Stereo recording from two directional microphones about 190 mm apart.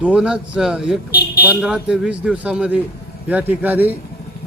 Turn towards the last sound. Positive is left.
turn(degrees=-10)  # may be behind; listen again after turning